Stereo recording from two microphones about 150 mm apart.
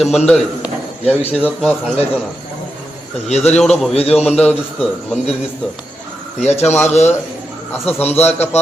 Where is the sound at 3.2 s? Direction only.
45° left (ahead or behind).